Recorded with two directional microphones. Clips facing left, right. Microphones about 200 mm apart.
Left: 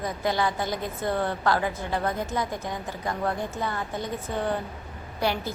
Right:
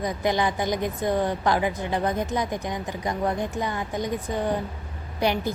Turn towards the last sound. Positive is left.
turn(degrees=-20)  # may be behind; listen again after turning